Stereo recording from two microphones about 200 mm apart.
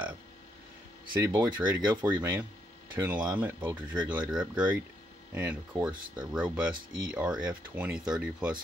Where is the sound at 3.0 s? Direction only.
10° right (ahead or behind).